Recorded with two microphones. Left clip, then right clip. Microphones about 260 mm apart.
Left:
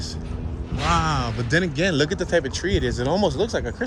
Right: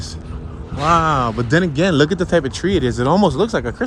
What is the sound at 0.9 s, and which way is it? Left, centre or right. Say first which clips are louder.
Speech: right 8 dB; centre.